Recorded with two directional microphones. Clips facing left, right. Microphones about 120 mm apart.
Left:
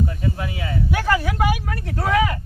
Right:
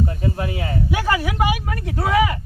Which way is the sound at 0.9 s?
10° right (ahead or behind).